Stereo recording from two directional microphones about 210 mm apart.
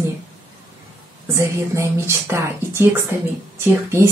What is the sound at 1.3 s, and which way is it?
Speech, 15° right (ahead or behind).